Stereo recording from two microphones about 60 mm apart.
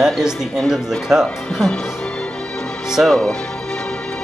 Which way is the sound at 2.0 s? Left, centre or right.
Centre.